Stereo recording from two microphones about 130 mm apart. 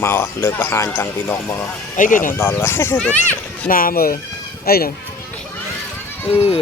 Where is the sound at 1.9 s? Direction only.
85° left.